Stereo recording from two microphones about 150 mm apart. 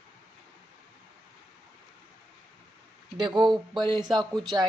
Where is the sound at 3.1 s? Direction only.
30° right (ahead or behind).